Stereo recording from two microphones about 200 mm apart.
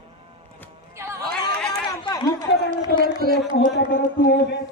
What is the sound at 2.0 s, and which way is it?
Run, 15° left (ahead or behind).